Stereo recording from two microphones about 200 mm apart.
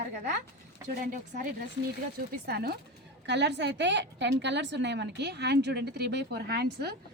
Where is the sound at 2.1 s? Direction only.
50° right (ahead or behind).